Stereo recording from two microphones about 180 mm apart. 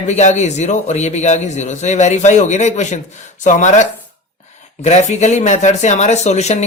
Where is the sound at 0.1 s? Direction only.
40° left (ahead or behind).